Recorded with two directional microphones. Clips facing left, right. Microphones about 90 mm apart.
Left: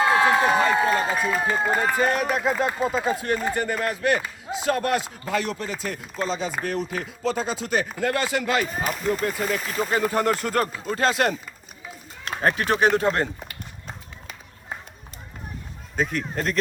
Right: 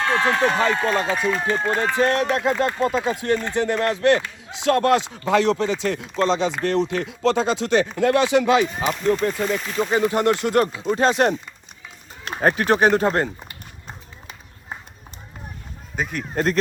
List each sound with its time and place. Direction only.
0.0 s speech: 5° left (ahead or behind)
3.5 s speech: 90° right
5.9 s speech: 5° left (ahead or behind)
6.2 s speech: 90° right
8.6 s speech: 5° left (ahead or behind)
10.8 s speech: 30° right (ahead or behind)
12.4 s speech: 35° right (ahead or behind)
16.0 s speech: 5° right (ahead or behind)
16.3 s speech: 35° right (ahead or behind)